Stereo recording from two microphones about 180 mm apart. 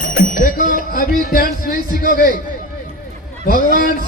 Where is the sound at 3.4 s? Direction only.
55° left (ahead or behind).